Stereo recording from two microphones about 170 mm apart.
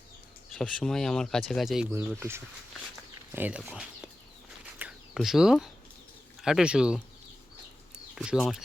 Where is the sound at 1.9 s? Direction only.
15° right (ahead or behind).